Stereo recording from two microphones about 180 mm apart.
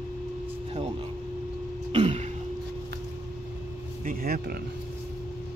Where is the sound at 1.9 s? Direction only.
35° right (ahead or behind).